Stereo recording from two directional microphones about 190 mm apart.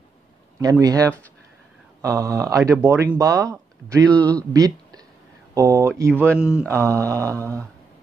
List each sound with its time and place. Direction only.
0.6 s speech: 20° right (ahead or behind)
4.6 s a sound: 20° right (ahead or behind)
5.5 s speech: 15° right (ahead or behind)
6.7 s speech: 15° right (ahead or behind)